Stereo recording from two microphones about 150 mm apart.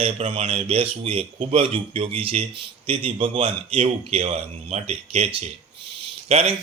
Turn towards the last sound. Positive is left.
turn(degrees=-45)  # may be behind; listen again after turning